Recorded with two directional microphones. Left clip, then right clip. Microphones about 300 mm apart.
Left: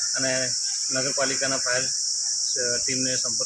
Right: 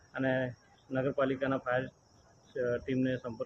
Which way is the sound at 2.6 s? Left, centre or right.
Centre.